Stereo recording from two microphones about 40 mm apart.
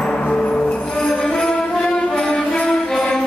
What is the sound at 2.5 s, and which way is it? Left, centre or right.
Jingle bell, left.